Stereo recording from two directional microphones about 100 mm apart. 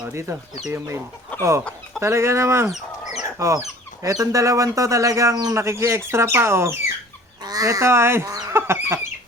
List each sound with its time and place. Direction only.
0.1 s speech: 25° right (ahead or behind)
3.2 s chicken: 30° right (ahead or behind)
4.0 s speech: 35° right (ahead or behind)
7.4 s speech: 40° right (ahead or behind)
8.3 s fowl: 40° right (ahead or behind)
8.5 s chicken: 25° right (ahead or behind)